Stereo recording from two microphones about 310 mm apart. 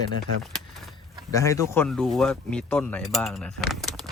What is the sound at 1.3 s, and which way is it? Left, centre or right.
Speech, centre.